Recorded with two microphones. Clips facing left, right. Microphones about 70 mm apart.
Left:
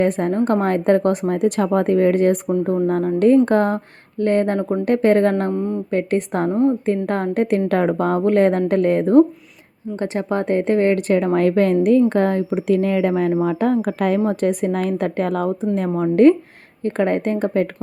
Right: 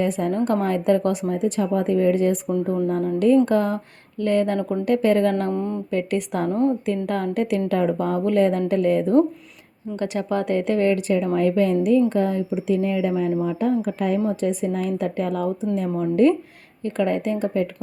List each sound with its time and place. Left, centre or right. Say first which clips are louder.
0.0 s a woman's voice: left 4 dB; left
1.3 s a woman's voice: left 4 dB; left
5.5 s speech: left 3 dB; centre
5.9 s a woman's voice: left 4 dB; left
6.5 s a woman's voice: left 3 dB; centre
6.8 s a woman's voice: left 3 dB; left
7.7 s a woman's voice: left 3 dB; left
9.9 s a woman's voice: left 2 dB; left